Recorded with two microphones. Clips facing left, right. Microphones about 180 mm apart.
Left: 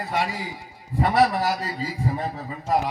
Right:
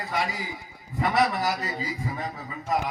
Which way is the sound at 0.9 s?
30° left (ahead or behind).